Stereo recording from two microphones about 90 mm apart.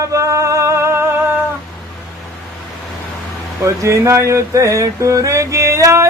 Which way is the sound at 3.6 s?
35° right (ahead or behind).